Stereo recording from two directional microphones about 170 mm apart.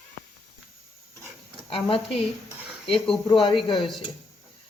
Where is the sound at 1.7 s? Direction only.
35° left (ahead or behind).